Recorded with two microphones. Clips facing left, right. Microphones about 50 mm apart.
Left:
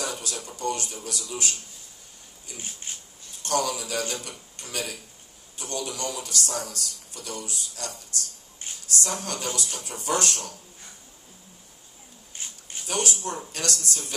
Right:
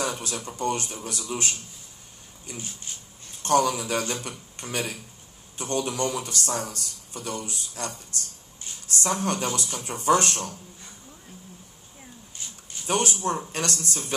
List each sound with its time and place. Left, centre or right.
0.0 s speech: right
2.5 s speech: left
3.4 s speech: right
12.8 s speech: right